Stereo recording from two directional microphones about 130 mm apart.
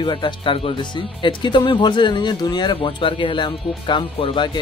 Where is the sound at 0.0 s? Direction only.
35° left (ahead or behind).